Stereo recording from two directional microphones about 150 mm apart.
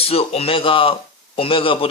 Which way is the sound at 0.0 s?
40° left (ahead or behind).